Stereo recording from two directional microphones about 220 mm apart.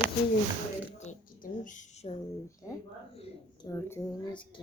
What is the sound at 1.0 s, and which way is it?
Speech, 35° left (ahead or behind).